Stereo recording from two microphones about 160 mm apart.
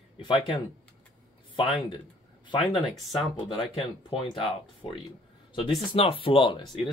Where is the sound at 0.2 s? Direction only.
30° left (ahead or behind).